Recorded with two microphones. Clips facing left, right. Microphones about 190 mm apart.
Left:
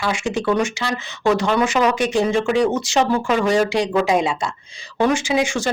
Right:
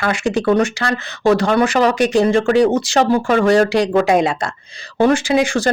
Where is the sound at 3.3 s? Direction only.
55° right (ahead or behind).